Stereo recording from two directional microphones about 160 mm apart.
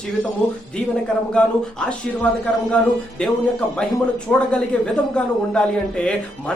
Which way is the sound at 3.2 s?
5° left (ahead or behind).